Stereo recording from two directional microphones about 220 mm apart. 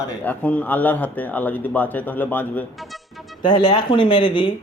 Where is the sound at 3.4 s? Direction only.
20° left (ahead or behind).